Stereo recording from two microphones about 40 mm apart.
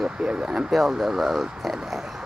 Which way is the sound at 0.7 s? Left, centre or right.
Centre.